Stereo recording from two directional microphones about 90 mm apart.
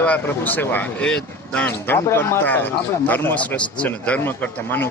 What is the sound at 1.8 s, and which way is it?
A man's voice, 25° left (ahead or behind).